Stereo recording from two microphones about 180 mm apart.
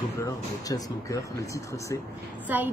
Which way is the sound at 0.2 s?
20° left (ahead or behind).